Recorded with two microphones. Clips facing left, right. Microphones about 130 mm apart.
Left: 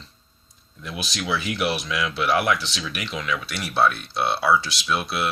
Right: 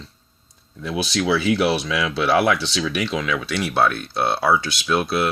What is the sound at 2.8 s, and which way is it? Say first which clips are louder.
Speech: right 7 dB; 90° right.